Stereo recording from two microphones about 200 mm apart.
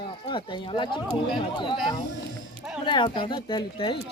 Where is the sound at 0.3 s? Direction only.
25° left (ahead or behind).